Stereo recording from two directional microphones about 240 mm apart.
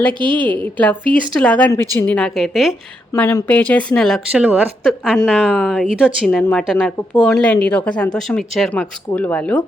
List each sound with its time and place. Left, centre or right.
0.1 s a woman's voice: centre
0.6 s speech: centre